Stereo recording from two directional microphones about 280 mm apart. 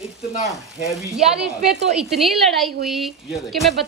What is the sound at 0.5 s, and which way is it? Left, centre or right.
A woman's voice, centre.